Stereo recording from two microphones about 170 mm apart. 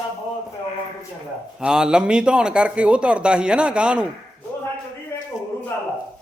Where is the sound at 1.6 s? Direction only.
5° right (ahead or behind).